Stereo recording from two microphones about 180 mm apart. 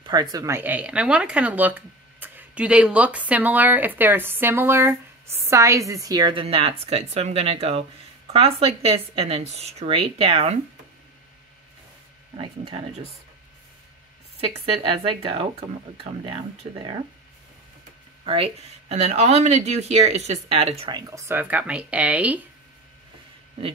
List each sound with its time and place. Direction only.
0.0 s a woman's voice: 20° right (ahead or behind)
12.4 s speech: 30° right (ahead or behind)
14.8 s a woman's voice: 30° right (ahead or behind)
18.2 s speech: 30° right (ahead or behind)
21.0 s speech: 15° right (ahead or behind)